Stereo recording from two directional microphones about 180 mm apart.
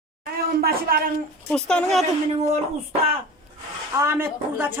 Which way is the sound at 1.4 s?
5° left (ahead or behind).